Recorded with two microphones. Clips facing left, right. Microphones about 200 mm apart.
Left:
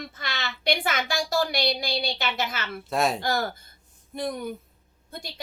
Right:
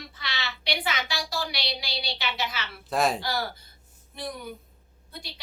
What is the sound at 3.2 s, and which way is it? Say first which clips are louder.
A woman's voice: left 4 dB; 45° left (ahead or behind).